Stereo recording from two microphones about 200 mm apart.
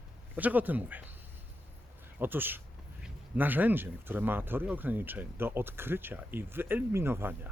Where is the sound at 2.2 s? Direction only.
10° right (ahead or behind).